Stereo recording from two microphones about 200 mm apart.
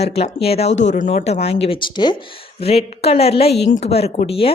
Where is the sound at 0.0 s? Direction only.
30° left (ahead or behind).